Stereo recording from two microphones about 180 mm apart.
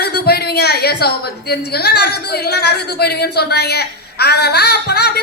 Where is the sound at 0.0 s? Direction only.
60° left (ahead or behind).